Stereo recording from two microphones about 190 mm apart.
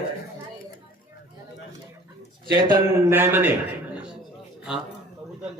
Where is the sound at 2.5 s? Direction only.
25° right (ahead or behind).